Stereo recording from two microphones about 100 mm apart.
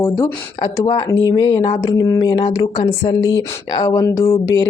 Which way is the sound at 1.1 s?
40° left (ahead or behind).